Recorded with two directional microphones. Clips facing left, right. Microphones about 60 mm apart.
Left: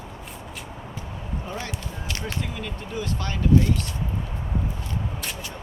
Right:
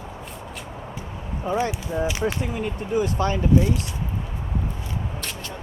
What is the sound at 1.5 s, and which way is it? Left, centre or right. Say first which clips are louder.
Speech: right 12 dB; centre.